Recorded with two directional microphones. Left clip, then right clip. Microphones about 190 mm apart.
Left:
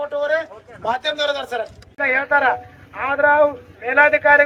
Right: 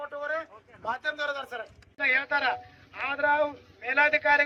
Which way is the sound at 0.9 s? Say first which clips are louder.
Left 10 dB; 10° left (ahead or behind).